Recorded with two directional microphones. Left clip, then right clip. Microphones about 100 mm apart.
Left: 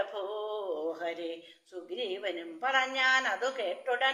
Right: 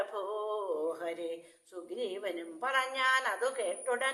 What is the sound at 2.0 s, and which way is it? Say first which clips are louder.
A woman's voice: left 2 dB; 40° right (ahead or behind).